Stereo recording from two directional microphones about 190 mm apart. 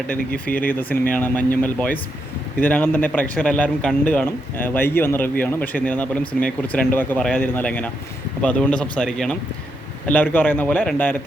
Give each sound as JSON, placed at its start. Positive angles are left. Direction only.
{"t": 0.3, "sound": "speech", "side_deg": 50}
{"t": 0.7, "sound": "a man's voice", "side_deg": 10}